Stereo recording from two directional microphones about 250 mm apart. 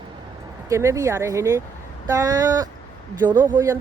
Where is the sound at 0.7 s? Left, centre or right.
Centre.